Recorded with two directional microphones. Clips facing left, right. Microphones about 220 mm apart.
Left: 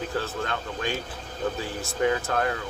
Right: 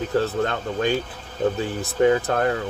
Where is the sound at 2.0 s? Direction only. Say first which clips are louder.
Right 6 dB; 35° right (ahead or behind).